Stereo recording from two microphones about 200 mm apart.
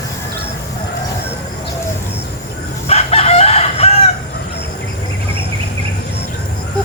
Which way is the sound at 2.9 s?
30° left (ahead or behind).